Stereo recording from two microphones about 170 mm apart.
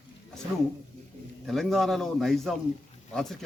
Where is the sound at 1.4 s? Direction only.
Centre (ahead or behind).